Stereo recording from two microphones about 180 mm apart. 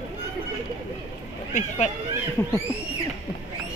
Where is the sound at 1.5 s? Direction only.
40° left (ahead or behind).